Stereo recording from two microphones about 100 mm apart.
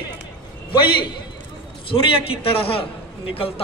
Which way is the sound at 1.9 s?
35° left (ahead or behind).